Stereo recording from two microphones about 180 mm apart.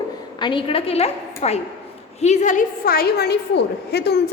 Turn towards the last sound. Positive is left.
turn(degrees=65)  # may be behind; listen again after turning